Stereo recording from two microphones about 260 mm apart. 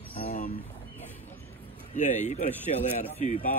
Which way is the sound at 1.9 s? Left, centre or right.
Left.